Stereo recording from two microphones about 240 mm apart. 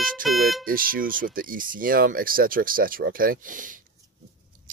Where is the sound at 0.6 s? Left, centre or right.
Right.